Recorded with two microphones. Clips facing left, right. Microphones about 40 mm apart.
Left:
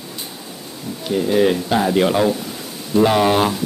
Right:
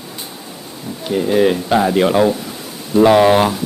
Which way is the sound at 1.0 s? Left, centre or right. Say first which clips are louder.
Right 2 dB; centre.